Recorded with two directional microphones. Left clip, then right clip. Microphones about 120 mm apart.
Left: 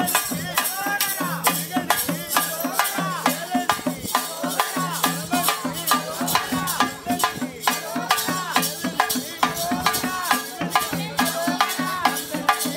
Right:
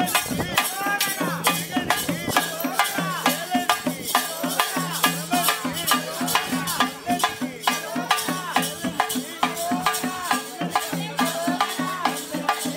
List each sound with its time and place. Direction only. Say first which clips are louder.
0.0 s music: even; 10° left (ahead or behind); by 9.0 s 30° left (ahead or behind)
9.4 s music: left 1 dB; 50° left (ahead or behind)